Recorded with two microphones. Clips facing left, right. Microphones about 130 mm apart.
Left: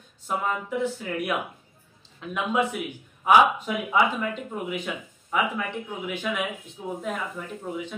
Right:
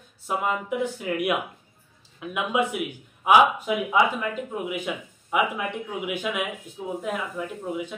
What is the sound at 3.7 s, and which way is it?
Speech, 5° right (ahead or behind).